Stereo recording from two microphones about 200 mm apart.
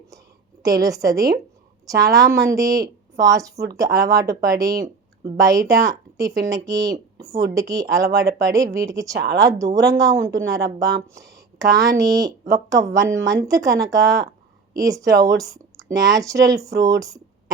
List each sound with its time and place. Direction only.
0.8 s speech: 15° right (ahead or behind)
9.1 s speech: 55° right (ahead or behind)
9.4 s speech: 15° right (ahead or behind)
15.4 s a sound: 15° right (ahead or behind)
16.0 s speech: 15° right (ahead or behind)